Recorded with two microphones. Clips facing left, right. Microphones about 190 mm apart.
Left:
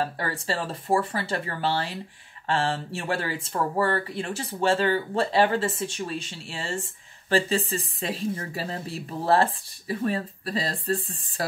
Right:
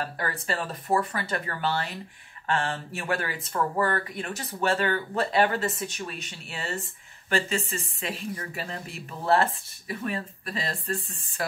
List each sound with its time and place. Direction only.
0.2 s speech: 30° left (ahead or behind)